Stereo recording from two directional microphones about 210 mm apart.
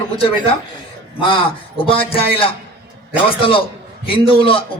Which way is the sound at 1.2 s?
25° left (ahead or behind).